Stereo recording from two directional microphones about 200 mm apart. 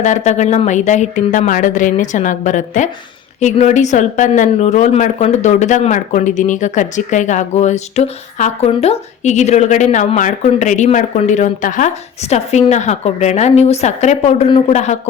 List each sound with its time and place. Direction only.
0.0 s a woman's voice: 35° left (ahead or behind)